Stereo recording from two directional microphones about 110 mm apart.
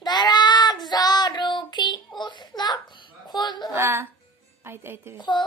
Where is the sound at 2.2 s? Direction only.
45° left (ahead or behind).